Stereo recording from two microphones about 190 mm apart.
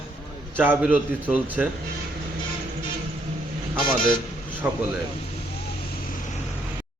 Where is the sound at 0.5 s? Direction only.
10° right (ahead or behind).